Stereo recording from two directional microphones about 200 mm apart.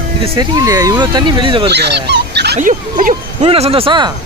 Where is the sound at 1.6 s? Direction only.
55° right (ahead or behind).